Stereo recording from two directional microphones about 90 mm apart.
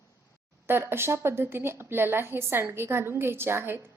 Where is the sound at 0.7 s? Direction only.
25° right (ahead or behind).